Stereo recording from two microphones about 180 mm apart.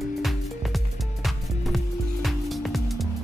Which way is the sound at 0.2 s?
Centre (ahead or behind).